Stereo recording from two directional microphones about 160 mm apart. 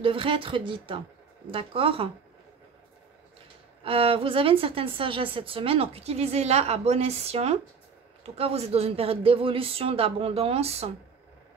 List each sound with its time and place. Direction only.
0.0 s a woman's voice: 35° right (ahead or behind)
3.8 s a woman's voice: 35° right (ahead or behind)